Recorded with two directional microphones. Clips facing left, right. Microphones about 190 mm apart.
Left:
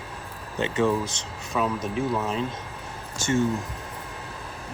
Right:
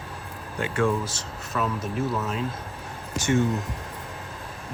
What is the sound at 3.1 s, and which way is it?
Speech, 15° right (ahead or behind).